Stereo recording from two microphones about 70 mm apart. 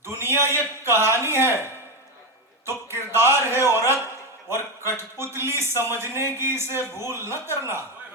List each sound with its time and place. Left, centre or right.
0.0 s a man's voice: right
2.6 s a sound: right
4.4 s a man's voice: right